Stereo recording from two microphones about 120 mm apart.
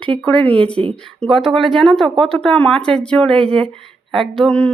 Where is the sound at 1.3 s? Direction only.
Centre (ahead or behind).